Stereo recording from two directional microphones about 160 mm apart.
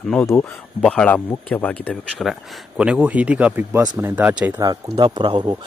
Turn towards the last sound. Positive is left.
turn(degrees=-25)  # may be behind; listen again after turning